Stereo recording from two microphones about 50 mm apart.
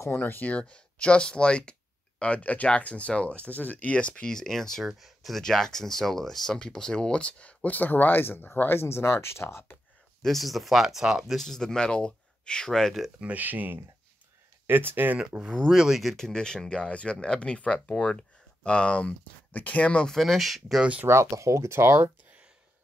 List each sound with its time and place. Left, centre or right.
0.1 s speech: left
0.6 s speech: left
3.9 s speech: left
4.8 s speech: centre
5.4 s speech: centre; by 9.8 s left
10.2 s speech: centre
11.3 s speech: centre
13.2 s speech: right
15.1 s speech: centre
16.2 s speech: centre
20.1 s speech: centre
21.1 s speech: right